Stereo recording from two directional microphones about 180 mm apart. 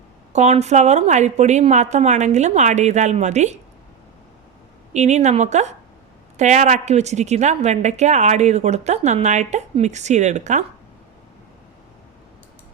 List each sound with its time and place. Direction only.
0.3 s a woman's voice: 40° right (ahead or behind)
4.9 s a woman's voice: 40° right (ahead or behind)